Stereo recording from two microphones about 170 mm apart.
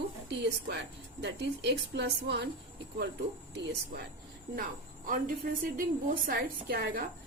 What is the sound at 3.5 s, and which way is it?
Speech, 85° right.